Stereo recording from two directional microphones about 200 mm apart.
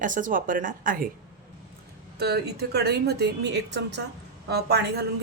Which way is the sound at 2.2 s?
55° right (ahead or behind).